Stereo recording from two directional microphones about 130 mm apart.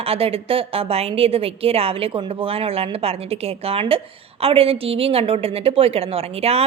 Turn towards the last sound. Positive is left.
turn(degrees=-50)  # may be behind; listen again after turning